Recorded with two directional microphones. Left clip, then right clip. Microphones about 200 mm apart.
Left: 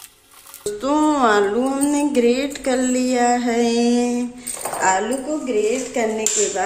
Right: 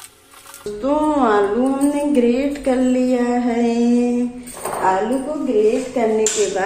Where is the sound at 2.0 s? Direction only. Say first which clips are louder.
Left 1 dB; 30° left (ahead or behind).